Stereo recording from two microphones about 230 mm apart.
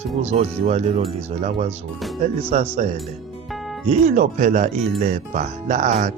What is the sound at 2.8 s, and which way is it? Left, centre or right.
Speech, right.